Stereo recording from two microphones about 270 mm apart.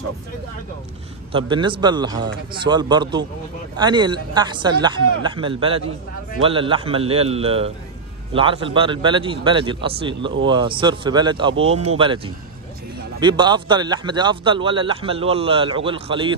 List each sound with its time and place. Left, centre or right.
1.3 s a man's voice: centre
13.2 s a man's voice: centre